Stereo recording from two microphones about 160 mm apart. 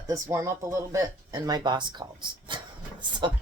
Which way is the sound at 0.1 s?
20° right (ahead or behind).